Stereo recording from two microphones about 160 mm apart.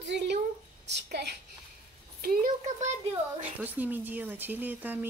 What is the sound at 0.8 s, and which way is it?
Speech, 90° right.